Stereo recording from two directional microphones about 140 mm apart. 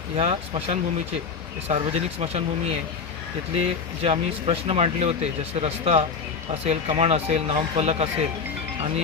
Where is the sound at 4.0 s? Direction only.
45° right (ahead or behind).